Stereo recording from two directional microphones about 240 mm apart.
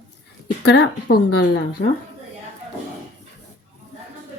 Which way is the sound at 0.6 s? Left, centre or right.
Left.